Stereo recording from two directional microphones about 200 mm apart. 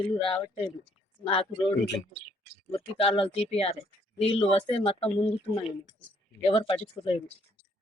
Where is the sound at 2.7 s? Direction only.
25° left (ahead or behind).